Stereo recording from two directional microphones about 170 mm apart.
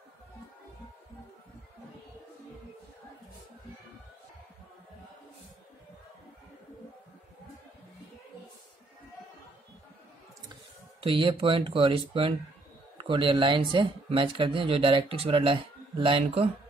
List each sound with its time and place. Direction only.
11.0 s speech: 30° right (ahead or behind)